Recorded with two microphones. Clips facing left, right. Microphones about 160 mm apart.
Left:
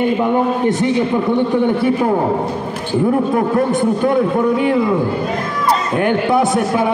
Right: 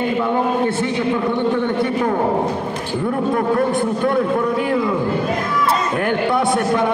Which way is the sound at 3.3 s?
Centre (ahead or behind).